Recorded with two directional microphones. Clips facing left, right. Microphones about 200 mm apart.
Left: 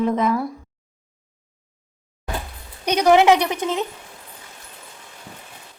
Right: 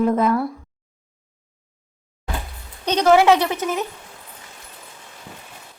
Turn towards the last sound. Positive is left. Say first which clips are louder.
# even
turn(degrees=20)  # may be behind; listen again after turning